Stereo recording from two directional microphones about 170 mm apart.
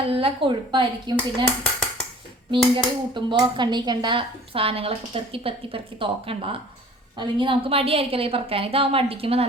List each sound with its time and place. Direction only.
0.0 s speech: 35° right (ahead or behind)
2.5 s speech: 30° right (ahead or behind)